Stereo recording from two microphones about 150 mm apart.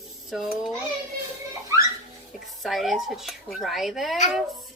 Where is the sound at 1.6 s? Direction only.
20° right (ahead or behind).